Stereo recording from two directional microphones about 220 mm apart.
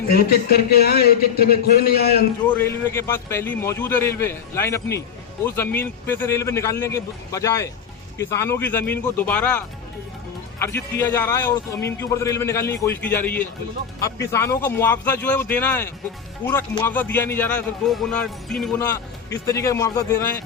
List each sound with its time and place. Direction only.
0.1 s a man's voice: 45° left (ahead or behind)
2.5 s a man's voice: 10° left (ahead or behind)
18.9 s a man's voice: 15° left (ahead or behind)